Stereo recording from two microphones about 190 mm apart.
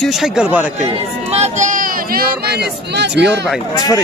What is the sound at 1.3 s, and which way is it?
Speech, 40° right (ahead or behind).